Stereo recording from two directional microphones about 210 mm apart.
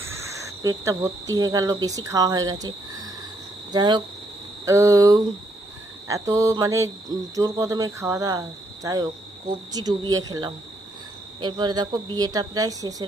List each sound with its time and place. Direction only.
0.0 s a woman's voice: 15° right (ahead or behind)